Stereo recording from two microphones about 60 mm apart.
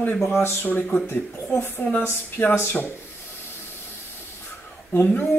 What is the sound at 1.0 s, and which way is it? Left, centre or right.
A woman's voice, left.